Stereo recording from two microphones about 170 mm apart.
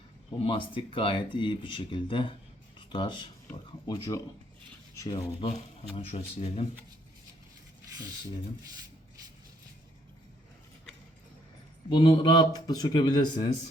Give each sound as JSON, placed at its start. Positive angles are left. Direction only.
{"t": 0.4, "sound": "speech", "side_deg": 30}
{"t": 6.1, "sound": "speech", "side_deg": 40}
{"t": 11.9, "sound": "speech", "side_deg": 25}